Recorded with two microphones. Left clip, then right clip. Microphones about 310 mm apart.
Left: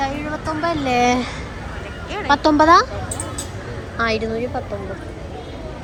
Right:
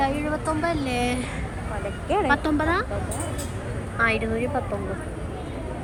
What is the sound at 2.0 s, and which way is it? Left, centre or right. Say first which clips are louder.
Speech: right 5 dB; centre.